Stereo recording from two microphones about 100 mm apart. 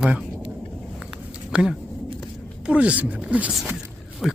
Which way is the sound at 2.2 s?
10° right (ahead or behind).